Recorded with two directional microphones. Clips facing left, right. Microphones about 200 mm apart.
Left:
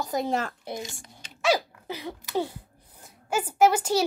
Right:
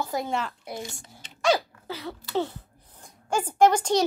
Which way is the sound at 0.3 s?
45° left (ahead or behind).